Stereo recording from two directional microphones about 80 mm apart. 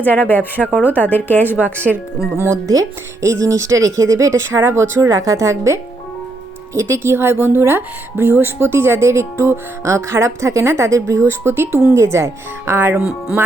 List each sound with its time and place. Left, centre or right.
0.0 s speech: left
2.4 s a woman's voice: right
13.0 s speech: centre